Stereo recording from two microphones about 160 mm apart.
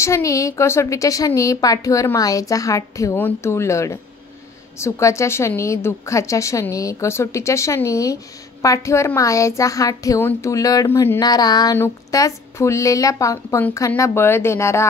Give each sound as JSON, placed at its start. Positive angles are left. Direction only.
{"t": 0.0, "sound": "a woman's voice", "side_deg": 20}